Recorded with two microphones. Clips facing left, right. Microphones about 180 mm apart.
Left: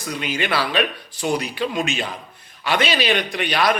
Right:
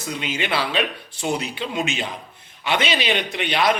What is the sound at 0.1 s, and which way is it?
A man's voice, 20° right (ahead or behind).